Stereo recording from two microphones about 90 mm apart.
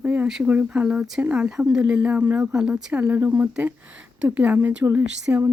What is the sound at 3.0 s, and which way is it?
Speech, 20° right (ahead or behind).